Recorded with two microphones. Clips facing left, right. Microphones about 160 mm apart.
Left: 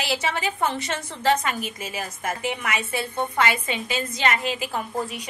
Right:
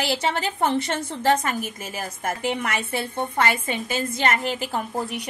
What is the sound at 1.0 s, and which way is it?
Speech, 30° right (ahead or behind).